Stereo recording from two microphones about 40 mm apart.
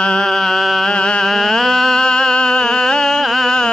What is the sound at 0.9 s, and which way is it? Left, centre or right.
Mantra, left.